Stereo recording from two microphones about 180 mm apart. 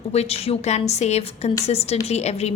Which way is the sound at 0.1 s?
35° left (ahead or behind).